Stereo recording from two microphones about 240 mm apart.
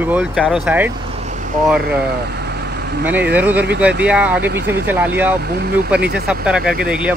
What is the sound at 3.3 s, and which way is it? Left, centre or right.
Speech, centre.